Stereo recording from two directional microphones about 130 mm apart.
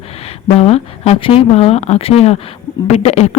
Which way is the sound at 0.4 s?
50° left (ahead or behind).